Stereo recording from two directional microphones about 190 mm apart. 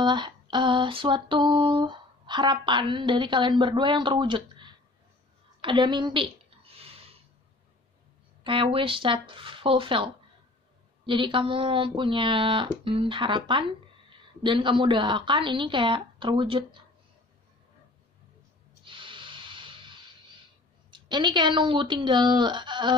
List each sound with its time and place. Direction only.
0.0 s music: 25° right (ahead or behind)
5.6 s a sound: 25° right (ahead or behind)
8.5 s music: 25° right (ahead or behind)
18.9 s music: 25° right (ahead or behind)